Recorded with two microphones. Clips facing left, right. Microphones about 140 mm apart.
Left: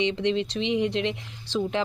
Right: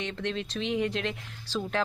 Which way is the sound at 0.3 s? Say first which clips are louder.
Left 6 dB; 80° left.